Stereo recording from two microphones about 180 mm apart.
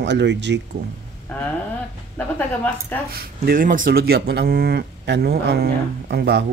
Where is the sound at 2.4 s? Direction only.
10° left (ahead or behind).